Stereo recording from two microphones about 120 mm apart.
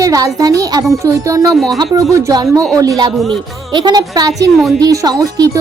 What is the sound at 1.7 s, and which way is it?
Speech, 30° right (ahead or behind).